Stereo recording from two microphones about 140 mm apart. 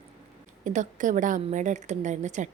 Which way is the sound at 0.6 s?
60° right (ahead or behind).